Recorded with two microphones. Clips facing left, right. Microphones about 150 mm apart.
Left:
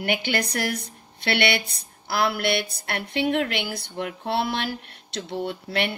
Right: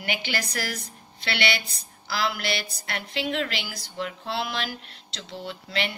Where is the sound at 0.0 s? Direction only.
55° left (ahead or behind).